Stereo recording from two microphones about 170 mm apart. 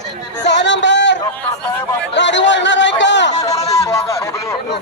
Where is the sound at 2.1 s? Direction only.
90° left.